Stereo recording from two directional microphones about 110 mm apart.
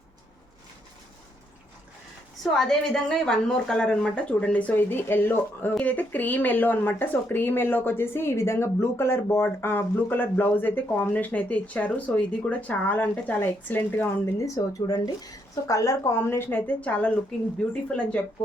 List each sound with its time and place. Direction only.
2.4 s speech: 5° left (ahead or behind); by 14.4 s 20° left (ahead or behind)
14.4 s a woman's voice: 30° left (ahead or behind); by 18.2 s 10° left (ahead or behind)